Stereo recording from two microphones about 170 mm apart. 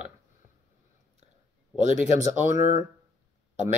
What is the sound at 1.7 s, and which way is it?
Speech, 45° right (ahead or behind).